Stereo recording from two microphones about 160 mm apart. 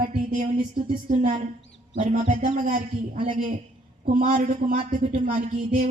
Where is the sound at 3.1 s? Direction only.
35° right (ahead or behind).